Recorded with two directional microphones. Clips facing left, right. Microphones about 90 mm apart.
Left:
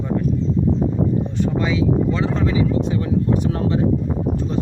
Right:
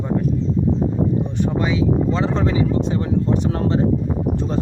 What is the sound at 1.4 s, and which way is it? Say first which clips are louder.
Speech: even; 20° right (ahead or behind).